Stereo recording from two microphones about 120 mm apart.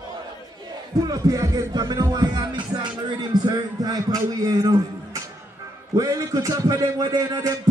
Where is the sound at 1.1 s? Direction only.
30° right (ahead or behind).